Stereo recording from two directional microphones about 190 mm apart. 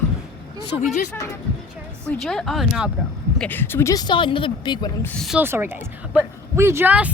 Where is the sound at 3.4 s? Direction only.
10° left (ahead or behind); by 4.9 s 25° left (ahead or behind).